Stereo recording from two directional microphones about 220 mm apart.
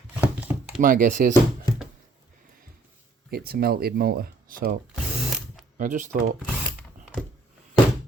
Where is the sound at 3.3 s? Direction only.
45° right (ahead or behind).